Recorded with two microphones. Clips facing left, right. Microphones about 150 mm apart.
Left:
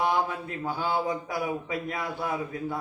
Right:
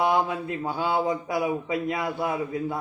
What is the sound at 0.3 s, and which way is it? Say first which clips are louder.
A man's voice: right 3 dB; 20° right (ahead or behind).